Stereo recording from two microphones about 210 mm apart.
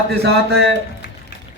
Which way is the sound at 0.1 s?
50° right (ahead or behind).